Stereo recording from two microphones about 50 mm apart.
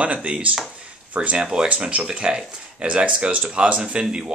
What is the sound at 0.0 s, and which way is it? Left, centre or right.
Speech, right.